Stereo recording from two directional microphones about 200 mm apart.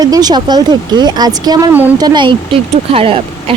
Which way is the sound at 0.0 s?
20° right (ahead or behind).